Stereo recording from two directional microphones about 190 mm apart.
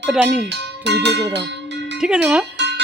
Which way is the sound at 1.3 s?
65° right (ahead or behind).